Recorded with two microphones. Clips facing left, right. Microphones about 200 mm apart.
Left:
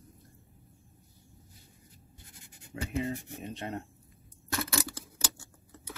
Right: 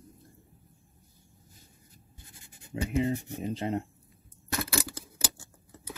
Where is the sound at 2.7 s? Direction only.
20° right (ahead or behind).